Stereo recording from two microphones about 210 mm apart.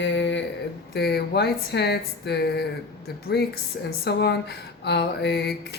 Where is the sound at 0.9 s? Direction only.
50° left (ahead or behind).